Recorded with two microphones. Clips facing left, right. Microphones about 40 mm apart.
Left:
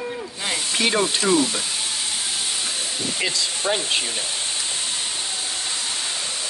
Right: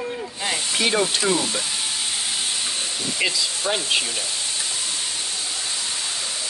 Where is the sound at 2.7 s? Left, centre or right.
Centre.